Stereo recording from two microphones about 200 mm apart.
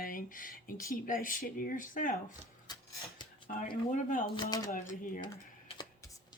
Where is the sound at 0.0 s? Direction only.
45° left (ahead or behind).